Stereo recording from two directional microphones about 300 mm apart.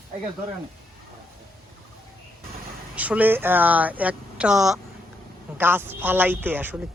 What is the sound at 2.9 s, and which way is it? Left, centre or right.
A woman's voice, centre.